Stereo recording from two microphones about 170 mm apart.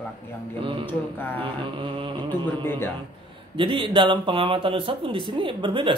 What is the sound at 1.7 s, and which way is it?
Speech, 30° right (ahead or behind).